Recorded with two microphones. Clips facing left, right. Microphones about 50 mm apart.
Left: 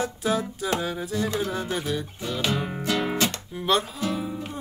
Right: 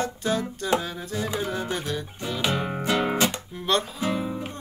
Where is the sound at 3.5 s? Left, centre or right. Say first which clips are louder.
Left 3 dB; centre.